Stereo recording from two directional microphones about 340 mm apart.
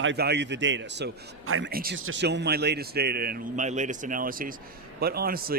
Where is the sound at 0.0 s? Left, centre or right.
Right.